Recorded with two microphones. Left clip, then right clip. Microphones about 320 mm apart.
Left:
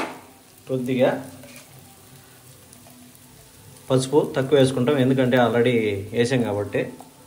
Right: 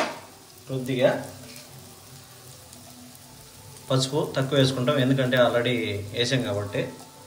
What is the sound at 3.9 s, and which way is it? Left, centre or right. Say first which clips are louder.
A man's voice: left 5 dB; centre.